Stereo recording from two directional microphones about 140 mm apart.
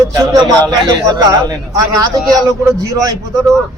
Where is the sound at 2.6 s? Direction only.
25° right (ahead or behind).